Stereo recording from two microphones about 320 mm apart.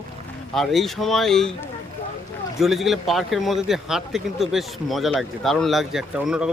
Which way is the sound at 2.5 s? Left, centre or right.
Centre.